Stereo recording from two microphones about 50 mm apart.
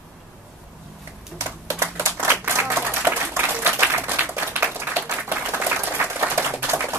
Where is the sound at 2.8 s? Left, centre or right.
Right.